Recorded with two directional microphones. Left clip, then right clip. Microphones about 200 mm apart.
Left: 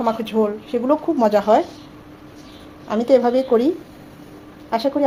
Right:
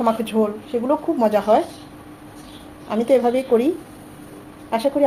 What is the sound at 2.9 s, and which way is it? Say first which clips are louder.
Speech: left 2 dB; 20° left (ahead or behind).